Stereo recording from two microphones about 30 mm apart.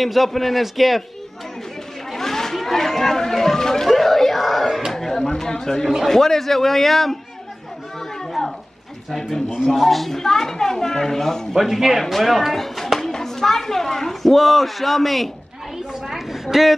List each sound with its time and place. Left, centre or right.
0.0 s speech: centre
2.0 s chatter: centre
3.9 s yell: centre
4.9 s a sound: centre
6.0 s a child's voice: centre
8.0 s children playing: centre
9.8 s speech: centre
10.1 s a child's voice: centre
11.5 s a woman's voice: centre
12.0 s speech: centre
14.3 s speech: centre
15.9 s a woman's voice: centre